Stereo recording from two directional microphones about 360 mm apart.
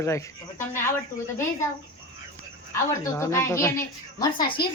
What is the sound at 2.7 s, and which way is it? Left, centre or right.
Speech, centre.